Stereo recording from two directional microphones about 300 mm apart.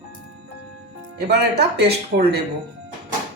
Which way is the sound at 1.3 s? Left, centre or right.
Right.